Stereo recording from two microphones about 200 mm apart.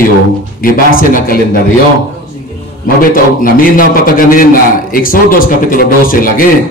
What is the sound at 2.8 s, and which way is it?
A man's voice, 45° left (ahead or behind).